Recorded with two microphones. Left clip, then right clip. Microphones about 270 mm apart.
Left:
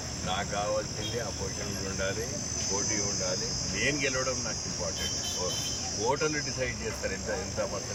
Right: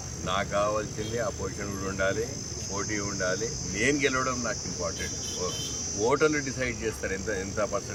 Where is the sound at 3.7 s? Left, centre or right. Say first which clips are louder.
Right 4 dB; centre.